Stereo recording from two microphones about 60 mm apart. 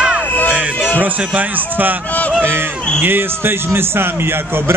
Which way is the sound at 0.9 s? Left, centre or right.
Right.